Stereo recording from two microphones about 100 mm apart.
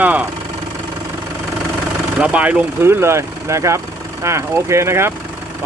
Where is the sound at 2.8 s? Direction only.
25° right (ahead or behind).